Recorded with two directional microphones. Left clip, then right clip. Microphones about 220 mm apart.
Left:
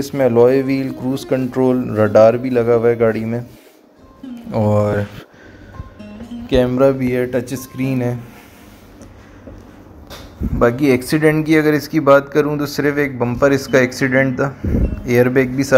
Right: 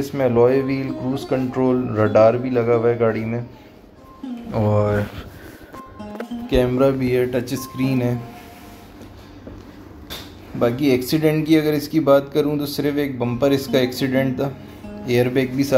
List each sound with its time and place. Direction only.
0.0 s speech: 45° left (ahead or behind)
4.5 s speech: 45° left (ahead or behind)
6.5 s speech: 25° left (ahead or behind)
10.6 s speech: 20° left (ahead or behind)
13.8 s speech: centre (ahead or behind)